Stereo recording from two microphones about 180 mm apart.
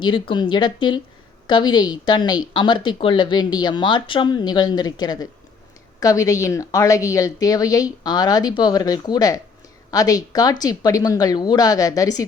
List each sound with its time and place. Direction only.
0.0 s speech: 25° left (ahead or behind)